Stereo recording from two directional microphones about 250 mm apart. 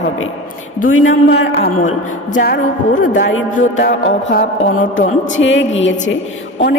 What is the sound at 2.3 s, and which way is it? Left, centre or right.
Speech, left.